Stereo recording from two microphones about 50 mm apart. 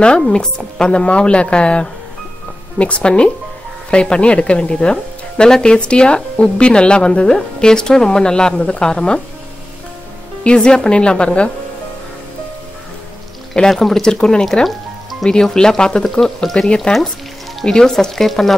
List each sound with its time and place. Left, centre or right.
0.3 s a woman's voice: centre
10.4 s a woman's voice: centre
13.7 s a woman's voice: centre